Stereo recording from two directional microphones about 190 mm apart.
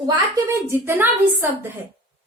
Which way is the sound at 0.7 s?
10° right (ahead or behind).